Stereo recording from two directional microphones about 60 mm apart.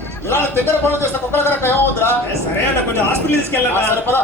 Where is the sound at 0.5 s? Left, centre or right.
Right.